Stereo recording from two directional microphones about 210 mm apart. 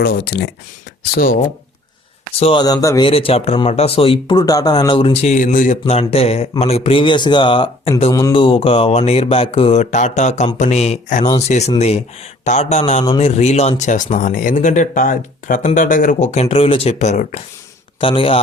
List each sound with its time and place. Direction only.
0.0 s speech: 50° left (ahead or behind)
2.4 s a man's voice: 20° left (ahead or behind)